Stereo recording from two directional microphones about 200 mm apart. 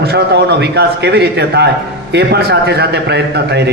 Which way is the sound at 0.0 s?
55° right (ahead or behind).